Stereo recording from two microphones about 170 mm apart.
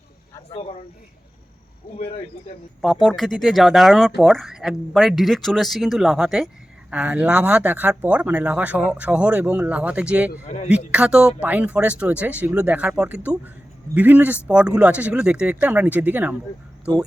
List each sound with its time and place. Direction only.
2.8 s speech: centre (ahead or behind)
10.4 s a man's voice: 40° left (ahead or behind)
10.7 s speech: 5° right (ahead or behind)